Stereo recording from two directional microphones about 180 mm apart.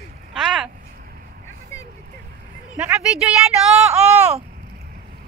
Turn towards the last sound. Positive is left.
turn(degrees=-5)  # may be behind; listen again after turning